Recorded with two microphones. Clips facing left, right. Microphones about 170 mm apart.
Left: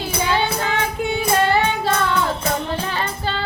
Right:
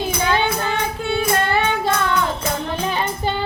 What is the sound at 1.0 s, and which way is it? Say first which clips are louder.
Music: left 1 dB; 15° left (ahead or behind).